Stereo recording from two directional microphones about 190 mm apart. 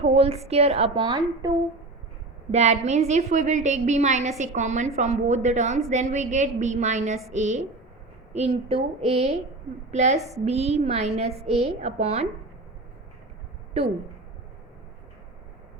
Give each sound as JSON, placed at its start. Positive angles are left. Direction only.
{"t": 0.0, "sound": "a woman's voice", "side_deg": -30}
{"t": 2.5, "sound": "a woman's voice", "side_deg": -35}